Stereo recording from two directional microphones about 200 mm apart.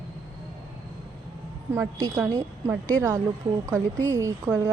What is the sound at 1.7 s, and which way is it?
Speech, 10° right (ahead or behind).